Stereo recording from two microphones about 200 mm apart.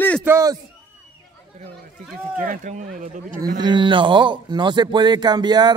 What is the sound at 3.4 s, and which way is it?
A man's voice, 20° right (ahead or behind).